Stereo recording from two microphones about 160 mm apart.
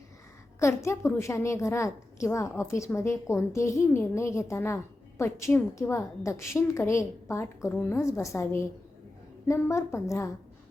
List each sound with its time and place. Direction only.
0.6 s a woman's voice: 20° left (ahead or behind)